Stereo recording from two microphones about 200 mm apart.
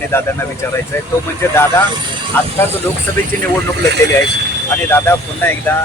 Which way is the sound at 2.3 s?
10° left (ahead or behind).